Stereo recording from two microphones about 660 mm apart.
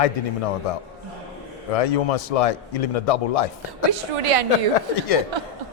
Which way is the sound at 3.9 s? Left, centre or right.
Right.